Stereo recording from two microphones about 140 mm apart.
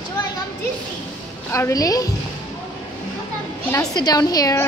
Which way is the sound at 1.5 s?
25° left (ahead or behind).